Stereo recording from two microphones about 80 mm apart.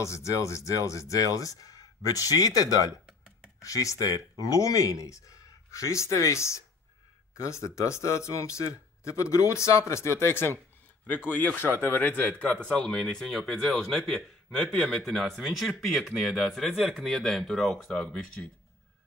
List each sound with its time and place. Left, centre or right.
0.0 s speech: left
11.1 s a man's voice: centre
12.4 s speech: centre
16.7 s speech: centre
17.0 s speech: centre
17.9 s speech: centre